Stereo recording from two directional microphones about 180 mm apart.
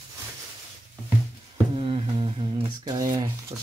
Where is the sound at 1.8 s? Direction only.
30° right (ahead or behind).